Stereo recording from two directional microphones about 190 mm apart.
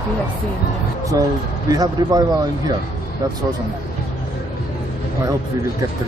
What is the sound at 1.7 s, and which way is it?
Speech, 20° right (ahead or behind).